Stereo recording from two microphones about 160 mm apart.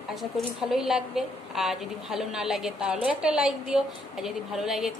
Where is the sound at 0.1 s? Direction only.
Centre (ahead or behind).